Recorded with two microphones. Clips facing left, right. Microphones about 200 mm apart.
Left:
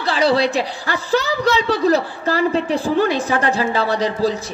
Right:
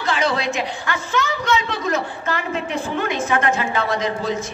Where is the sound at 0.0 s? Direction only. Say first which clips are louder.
Left 5 dB; 35° left (ahead or behind).